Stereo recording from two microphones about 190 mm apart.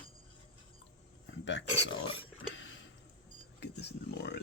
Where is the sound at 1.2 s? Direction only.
75° left (ahead or behind).